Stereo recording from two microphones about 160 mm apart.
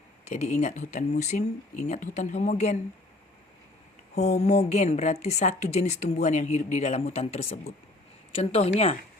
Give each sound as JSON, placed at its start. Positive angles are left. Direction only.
{"t": 0.3, "sound": "a woman's voice", "side_deg": 45}
{"t": 4.1, "sound": "a woman's voice", "side_deg": 45}